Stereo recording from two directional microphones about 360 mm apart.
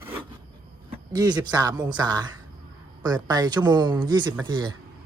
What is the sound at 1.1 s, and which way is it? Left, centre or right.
Speech, centre.